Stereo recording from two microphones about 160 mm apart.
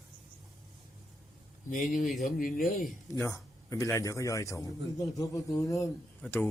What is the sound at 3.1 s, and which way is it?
A man's voice, 20° left (ahead or behind).